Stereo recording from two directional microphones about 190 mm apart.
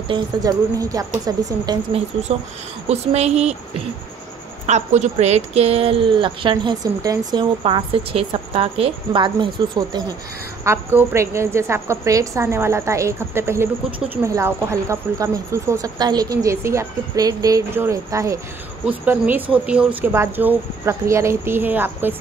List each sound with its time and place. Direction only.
0.1 s a woman's voice: 20° right (ahead or behind)
2.9 s a woman's voice: 35° right (ahead or behind); by 13.7 s 15° right (ahead or behind)
13.8 s a woman's voice: 30° right (ahead or behind)
14.1 s speech: 15° right (ahead or behind)